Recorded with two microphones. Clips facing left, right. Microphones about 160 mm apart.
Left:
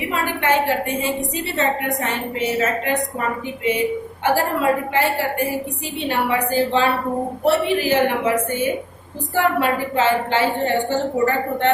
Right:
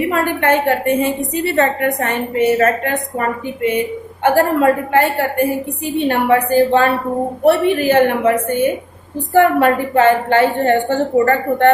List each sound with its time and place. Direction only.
0.1 s a woman's voice: 55° right (ahead or behind)